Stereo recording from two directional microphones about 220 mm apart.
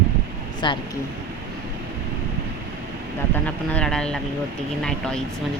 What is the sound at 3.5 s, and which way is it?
Speech, 5° left (ahead or behind).